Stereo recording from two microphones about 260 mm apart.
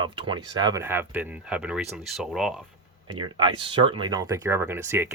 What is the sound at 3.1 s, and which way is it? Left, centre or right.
Speech, centre.